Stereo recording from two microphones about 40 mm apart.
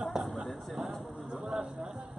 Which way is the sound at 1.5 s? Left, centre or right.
Right.